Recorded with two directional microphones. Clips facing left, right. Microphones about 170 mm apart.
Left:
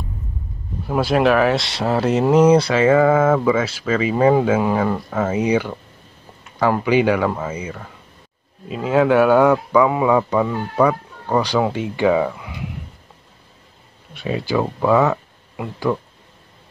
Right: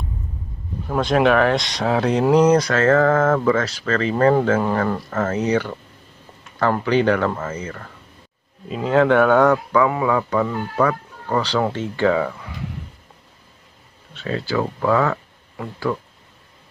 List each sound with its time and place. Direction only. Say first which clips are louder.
0.8 s speech: left 1 dB; 5° left (ahead or behind)
14.1 s speech: left 2 dB; 15° left (ahead or behind)